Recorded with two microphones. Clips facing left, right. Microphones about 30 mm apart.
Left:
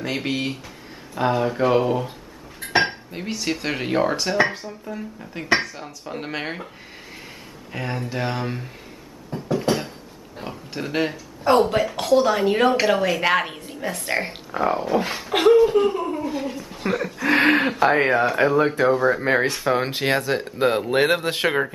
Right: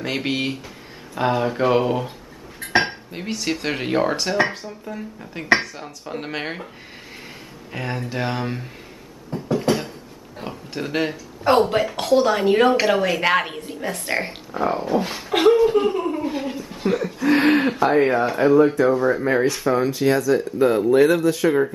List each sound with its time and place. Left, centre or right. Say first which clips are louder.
0.0 s speech: right 1 dB; centre
7.7 s speech: right 1 dB; centre
9.3 s a sound: right 1 dB; centre
10.4 s oink: right 1 dB; centre
11.6 s speech: even; centre
17.0 s a sound: even; left
17.7 s speech: even; left
18.8 s speech: right 1 dB; left